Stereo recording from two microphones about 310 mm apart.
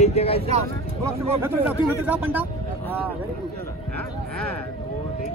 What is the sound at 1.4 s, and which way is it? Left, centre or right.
Speech, centre.